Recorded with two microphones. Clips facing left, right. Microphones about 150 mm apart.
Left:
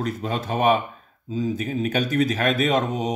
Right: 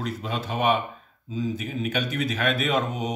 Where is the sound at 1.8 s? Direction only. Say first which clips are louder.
Left 6 dB; 40° left (ahead or behind).